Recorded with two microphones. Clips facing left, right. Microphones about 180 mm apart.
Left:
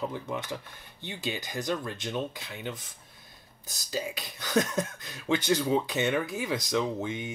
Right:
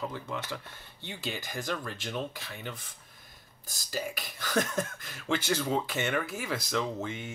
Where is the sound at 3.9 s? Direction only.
20° left (ahead or behind).